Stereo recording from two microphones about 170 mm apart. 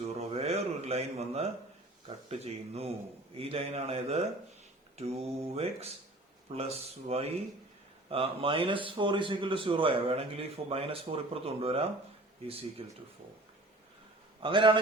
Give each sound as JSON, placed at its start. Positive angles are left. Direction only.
{"t": 0.0, "sound": "a sound", "side_deg": -35}
{"t": 2.0, "sound": "a man's voice", "side_deg": -35}
{"t": 14.4, "sound": "a man's voice", "side_deg": -30}